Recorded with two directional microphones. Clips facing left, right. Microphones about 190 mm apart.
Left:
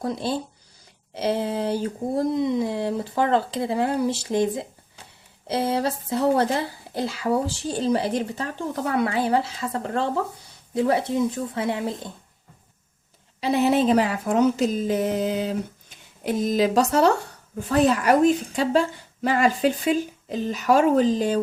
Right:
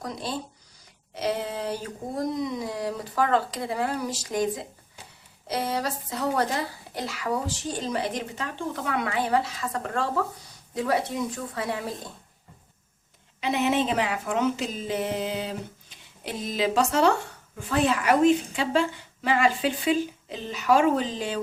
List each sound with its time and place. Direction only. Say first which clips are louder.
0.0 s speech: left 6 dB; 30° left (ahead or behind)
13.4 s a woman's voice: left 5 dB; 35° left (ahead or behind)